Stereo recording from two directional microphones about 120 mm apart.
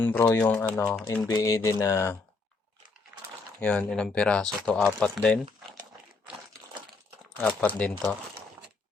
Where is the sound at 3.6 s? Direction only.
10° left (ahead or behind).